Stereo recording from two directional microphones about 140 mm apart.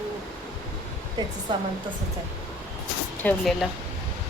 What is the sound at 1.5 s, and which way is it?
Speech, 30° right (ahead or behind).